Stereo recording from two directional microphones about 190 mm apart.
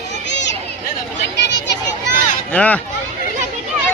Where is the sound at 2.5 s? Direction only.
5° left (ahead or behind).